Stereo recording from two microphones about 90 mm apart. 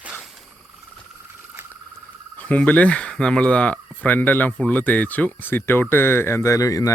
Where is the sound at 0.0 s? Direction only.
10° right (ahead or behind).